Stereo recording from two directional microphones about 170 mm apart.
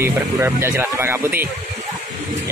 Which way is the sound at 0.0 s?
15° right (ahead or behind).